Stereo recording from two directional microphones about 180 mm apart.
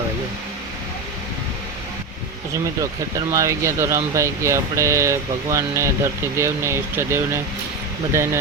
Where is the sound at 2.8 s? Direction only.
15° right (ahead or behind).